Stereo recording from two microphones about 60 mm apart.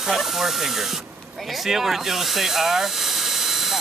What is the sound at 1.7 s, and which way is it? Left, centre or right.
Electric toothbrush, centre.